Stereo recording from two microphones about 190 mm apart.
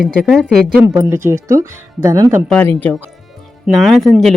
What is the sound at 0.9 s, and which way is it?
Speech, 15° right (ahead or behind).